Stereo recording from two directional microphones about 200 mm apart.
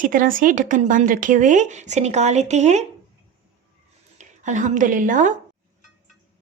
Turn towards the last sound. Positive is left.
turn(degrees=-40)  # may be behind; listen again after turning